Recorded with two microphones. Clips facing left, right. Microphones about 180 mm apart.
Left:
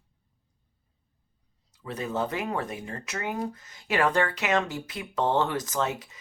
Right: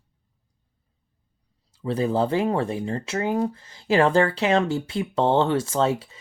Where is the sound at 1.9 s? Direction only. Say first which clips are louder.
Right 8 dB; 30° right (ahead or behind).